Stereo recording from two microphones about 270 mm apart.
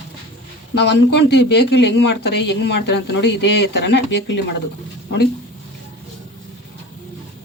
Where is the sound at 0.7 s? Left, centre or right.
Left.